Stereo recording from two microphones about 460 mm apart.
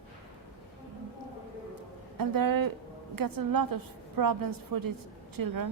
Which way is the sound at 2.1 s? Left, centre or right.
Right.